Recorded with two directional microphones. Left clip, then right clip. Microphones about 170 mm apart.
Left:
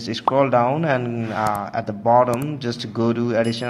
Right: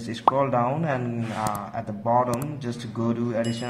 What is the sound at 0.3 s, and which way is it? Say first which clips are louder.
A man's voice: left 5 dB; 25° left (ahead or behind).